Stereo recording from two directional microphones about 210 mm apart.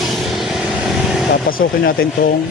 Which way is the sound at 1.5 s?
45° left (ahead or behind).